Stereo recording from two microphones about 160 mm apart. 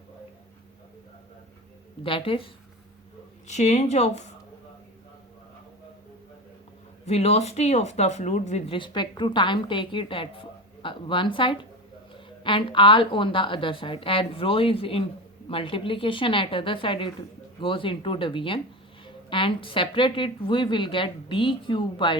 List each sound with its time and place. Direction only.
2.0 s speech: 35° left (ahead or behind)
3.4 s speech: 45° left (ahead or behind)
7.0 s speech: 40° left (ahead or behind)